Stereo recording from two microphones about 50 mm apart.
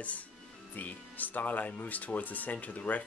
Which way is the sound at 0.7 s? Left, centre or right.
Left.